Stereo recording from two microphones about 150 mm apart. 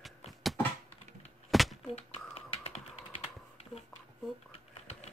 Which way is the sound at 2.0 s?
40° left (ahead or behind).